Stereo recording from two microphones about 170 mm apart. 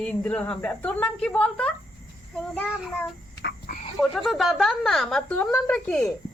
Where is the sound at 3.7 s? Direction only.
50° left (ahead or behind).